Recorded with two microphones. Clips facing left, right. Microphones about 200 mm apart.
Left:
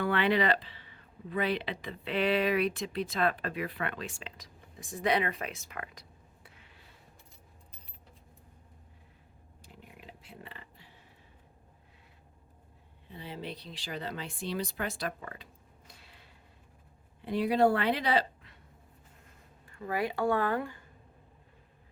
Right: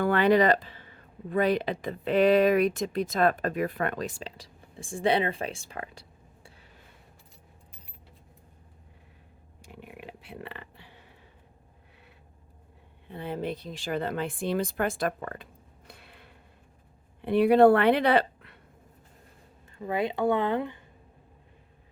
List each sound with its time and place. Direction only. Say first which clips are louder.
0.0 s speech: right 6 dB; 45° right (ahead or behind)
9.7 s a sound: right 8 dB; 65° right (ahead or behind)
13.1 s speech: right 8 dB; 55° right (ahead or behind)
15.9 s a sound: right 7 dB; 60° right (ahead or behind)
17.2 s a woman's voice: right 8 dB; 60° right (ahead or behind)
19.7 s speech: right 4 dB; 20° right (ahead or behind)